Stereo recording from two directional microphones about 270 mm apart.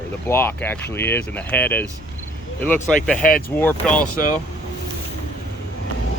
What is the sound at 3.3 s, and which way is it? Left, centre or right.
Speech, left.